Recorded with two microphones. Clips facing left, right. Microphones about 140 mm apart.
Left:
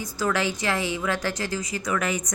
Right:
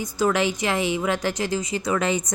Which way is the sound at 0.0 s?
20° right (ahead or behind).